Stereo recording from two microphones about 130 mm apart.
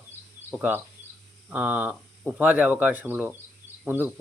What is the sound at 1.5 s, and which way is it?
Speech, 10° right (ahead or behind).